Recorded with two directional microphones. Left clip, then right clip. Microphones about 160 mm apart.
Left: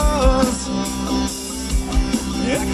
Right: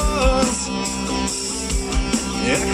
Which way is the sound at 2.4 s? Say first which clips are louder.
Right 1 dB; 20° right (ahead or behind).